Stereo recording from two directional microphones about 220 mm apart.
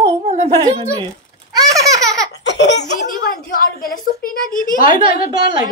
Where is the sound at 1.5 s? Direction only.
15° right (ahead or behind).